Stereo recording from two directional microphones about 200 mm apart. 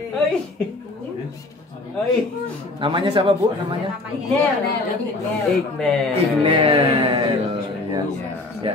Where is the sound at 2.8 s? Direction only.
25° right (ahead or behind).